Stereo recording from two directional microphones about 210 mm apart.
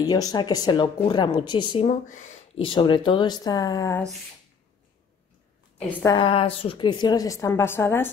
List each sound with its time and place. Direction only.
0.0 s a woman's voice: 15° left (ahead or behind)
1.9 s speech: 35° left (ahead or behind)
2.6 s a woman's voice: 25° left (ahead or behind)
5.8 s a woman's voice: 10° left (ahead or behind)
6.1 s a woman's voice: 25° left (ahead or behind)